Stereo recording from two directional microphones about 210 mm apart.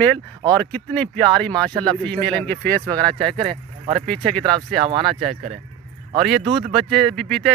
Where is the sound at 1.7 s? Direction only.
20° right (ahead or behind).